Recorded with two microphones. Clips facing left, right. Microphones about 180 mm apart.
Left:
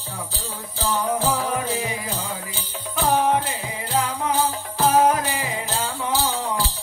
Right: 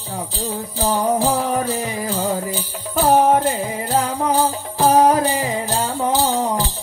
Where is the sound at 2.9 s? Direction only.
45° right (ahead or behind).